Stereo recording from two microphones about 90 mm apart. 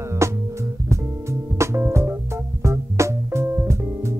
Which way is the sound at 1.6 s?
30° right (ahead or behind).